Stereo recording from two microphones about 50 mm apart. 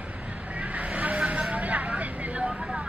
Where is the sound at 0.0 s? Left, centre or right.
Right.